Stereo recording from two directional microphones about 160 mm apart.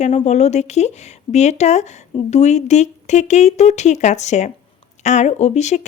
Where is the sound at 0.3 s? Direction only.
45° left (ahead or behind).